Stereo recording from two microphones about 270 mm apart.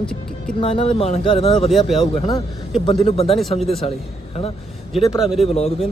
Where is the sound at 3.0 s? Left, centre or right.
Left.